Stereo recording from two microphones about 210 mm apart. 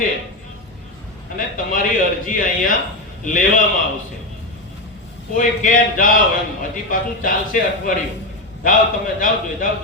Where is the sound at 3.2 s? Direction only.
40° left (ahead or behind).